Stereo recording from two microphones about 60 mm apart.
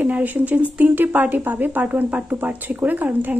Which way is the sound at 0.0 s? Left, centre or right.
Right.